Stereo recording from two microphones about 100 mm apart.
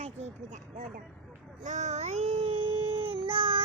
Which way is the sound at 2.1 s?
90° right.